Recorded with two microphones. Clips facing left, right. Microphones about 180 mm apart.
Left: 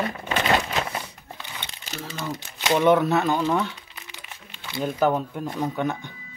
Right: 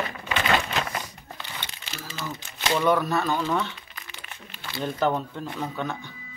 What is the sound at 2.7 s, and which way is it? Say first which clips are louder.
Speech: left 4 dB; 25° left (ahead or behind).